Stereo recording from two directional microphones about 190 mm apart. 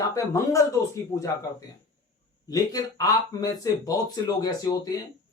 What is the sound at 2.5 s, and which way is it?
Speech, 20° left (ahead or behind).